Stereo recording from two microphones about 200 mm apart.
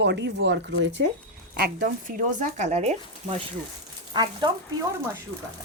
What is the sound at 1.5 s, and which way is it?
Speech, 45° right (ahead or behind).